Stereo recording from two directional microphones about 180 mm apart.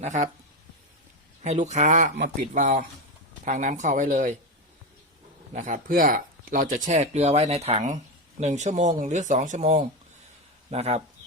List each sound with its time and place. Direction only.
0.0 s speech: 40° right (ahead or behind)
1.5 s speech: 40° right (ahead or behind)
2.1 s speech: 65° right (ahead or behind)
2.6 s speech: 45° right (ahead or behind)
5.5 s speech: 45° right (ahead or behind)
10.7 s speech: 35° right (ahead or behind)